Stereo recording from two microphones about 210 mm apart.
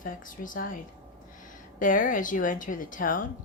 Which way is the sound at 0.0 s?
40° left (ahead or behind).